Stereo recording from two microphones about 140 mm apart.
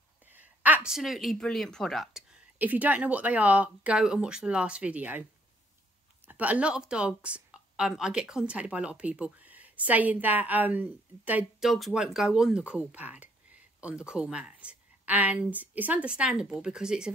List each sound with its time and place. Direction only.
0.2 s a woman's voice: 10° right (ahead or behind)
2.6 s a woman's voice: 10° right (ahead or behind)
6.2 s a woman's voice: 10° right (ahead or behind)